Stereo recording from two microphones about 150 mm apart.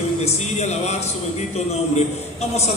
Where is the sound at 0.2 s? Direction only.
45° left (ahead or behind).